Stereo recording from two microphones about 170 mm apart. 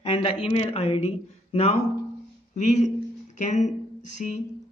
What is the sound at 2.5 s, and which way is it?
Speech, 45° left (ahead or behind).